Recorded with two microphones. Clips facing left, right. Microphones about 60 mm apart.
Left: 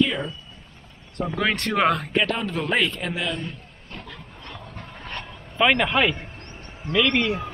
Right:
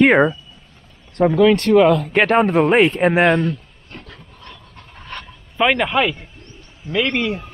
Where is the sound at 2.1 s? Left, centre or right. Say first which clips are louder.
Right 10 dB; right.